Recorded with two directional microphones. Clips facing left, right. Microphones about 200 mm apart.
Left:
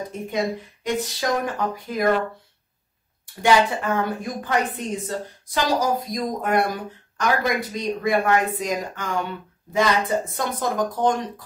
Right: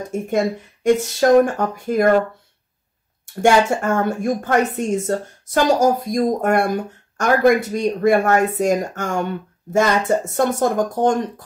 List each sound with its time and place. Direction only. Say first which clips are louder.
0.1 s a woman's voice: right 7 dB; 45° right (ahead or behind)
3.3 s a woman's voice: right 4 dB; 45° right (ahead or behind)